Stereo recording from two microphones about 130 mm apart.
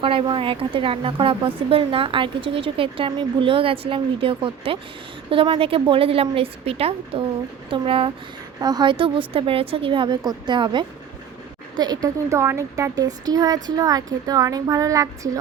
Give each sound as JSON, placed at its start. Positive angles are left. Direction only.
{"t": 0.0, "sound": "a woman's voice", "side_deg": -40}
{"t": 8.6, "sound": "a woman's voice", "side_deg": -35}
{"t": 12.0, "sound": "speech", "side_deg": -20}